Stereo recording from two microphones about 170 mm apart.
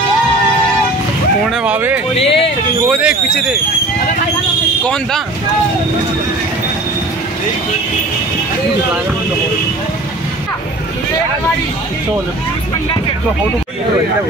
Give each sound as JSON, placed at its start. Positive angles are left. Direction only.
{"t": 1.5, "sound": "speech", "side_deg": -5}
{"t": 2.1, "sound": "speech", "side_deg": 35}
{"t": 2.9, "sound": "speech", "side_deg": -5}
{"t": 4.8, "sound": "speech", "side_deg": 5}